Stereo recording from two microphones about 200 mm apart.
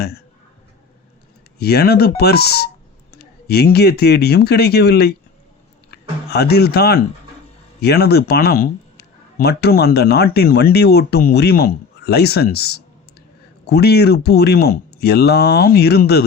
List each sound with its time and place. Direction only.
1.5 s a man's voice: 50° left (ahead or behind)
6.3 s a man's voice: 55° left (ahead or behind)